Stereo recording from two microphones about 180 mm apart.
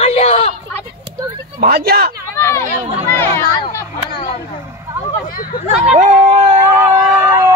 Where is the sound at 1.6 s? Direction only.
60° right (ahead or behind).